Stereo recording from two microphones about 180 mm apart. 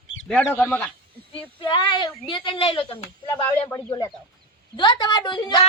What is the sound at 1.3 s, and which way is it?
Speech, 30° left (ahead or behind).